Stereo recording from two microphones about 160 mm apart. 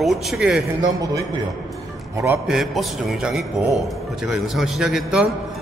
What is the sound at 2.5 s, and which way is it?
A man's voice, centre (ahead or behind).